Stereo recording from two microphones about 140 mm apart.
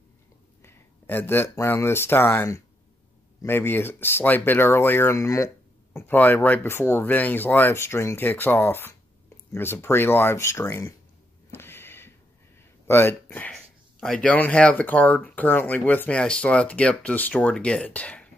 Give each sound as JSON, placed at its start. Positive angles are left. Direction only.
{"t": 0.6, "sound": "speech", "side_deg": 15}
{"t": 11.5, "sound": "a sound", "side_deg": 15}
{"t": 12.8, "sound": "speech", "side_deg": 15}